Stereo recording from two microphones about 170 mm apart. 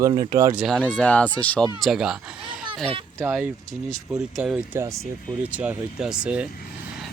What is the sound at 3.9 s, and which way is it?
Speech, centre (ahead or behind).